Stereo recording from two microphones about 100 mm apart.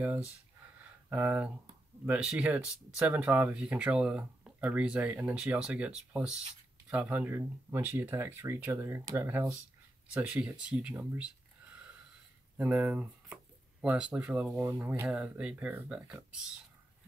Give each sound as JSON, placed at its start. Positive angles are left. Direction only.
{"t": 1.1, "sound": "speech", "side_deg": -15}
{"t": 10.1, "sound": "speech", "side_deg": -10}
{"t": 12.5, "sound": "speech", "side_deg": -15}